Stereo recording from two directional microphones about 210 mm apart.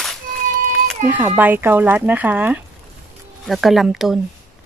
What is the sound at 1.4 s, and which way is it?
Speech, 10° right (ahead or behind).